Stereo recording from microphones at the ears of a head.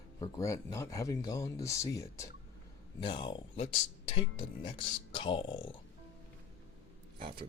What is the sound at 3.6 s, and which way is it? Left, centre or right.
Speech, left.